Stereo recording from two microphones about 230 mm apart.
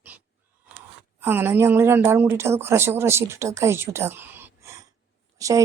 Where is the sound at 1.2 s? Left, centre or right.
Centre.